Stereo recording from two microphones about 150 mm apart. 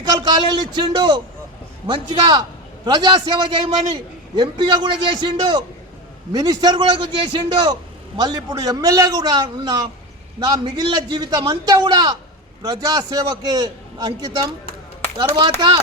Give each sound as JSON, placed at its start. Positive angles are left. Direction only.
{"t": 0.0, "sound": "a man's voice", "side_deg": -30}
{"t": 15.2, "sound": "a man's voice", "side_deg": -30}